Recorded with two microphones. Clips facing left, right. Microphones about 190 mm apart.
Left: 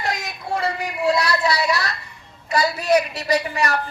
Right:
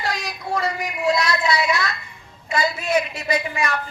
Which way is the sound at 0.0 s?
20° left (ahead or behind).